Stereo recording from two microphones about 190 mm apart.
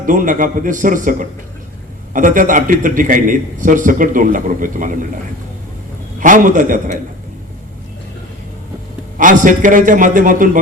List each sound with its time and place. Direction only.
0.0 s a man's voice: 45° right (ahead or behind)
6.1 s a man's voice: 45° right (ahead or behind)
9.1 s a man's voice: 45° right (ahead or behind)